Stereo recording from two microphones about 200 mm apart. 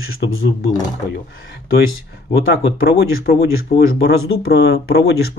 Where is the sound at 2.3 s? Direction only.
50° left (ahead or behind).